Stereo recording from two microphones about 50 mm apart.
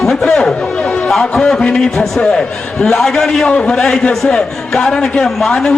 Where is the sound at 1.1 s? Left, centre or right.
Centre.